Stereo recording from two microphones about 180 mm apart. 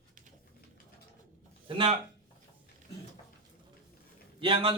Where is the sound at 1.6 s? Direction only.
30° right (ahead or behind).